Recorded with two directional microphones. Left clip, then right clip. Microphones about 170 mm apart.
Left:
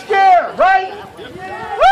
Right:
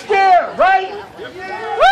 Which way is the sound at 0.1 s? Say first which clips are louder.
Left 1 dB; 15° right (ahead or behind).